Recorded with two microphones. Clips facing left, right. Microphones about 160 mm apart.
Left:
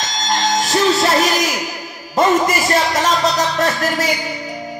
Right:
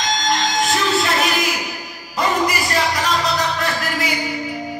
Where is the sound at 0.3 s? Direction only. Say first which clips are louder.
Left 3 dB; 45° left (ahead or behind).